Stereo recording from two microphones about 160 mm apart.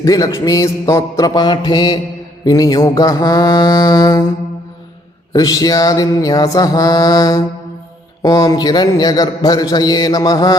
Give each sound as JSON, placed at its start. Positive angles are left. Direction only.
{"t": 0.0, "sound": "speech", "side_deg": 20}
{"t": 5.3, "sound": "speech", "side_deg": 25}